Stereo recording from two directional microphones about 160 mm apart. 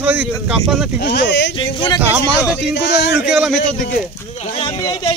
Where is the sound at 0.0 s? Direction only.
10° right (ahead or behind).